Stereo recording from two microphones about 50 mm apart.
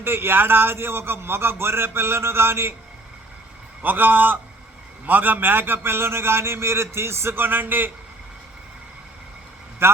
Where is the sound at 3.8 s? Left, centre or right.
Right.